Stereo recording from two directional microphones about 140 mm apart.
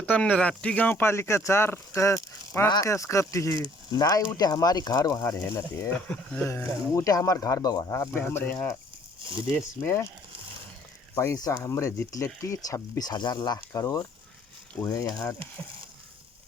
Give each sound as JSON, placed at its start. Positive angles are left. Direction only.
{"t": 0.0, "sound": "speech", "side_deg": 10}
{"t": 6.1, "sound": "speech", "side_deg": 10}
{"t": 6.5, "sound": "speech", "side_deg": 20}
{"t": 11.1, "sound": "speech", "side_deg": 20}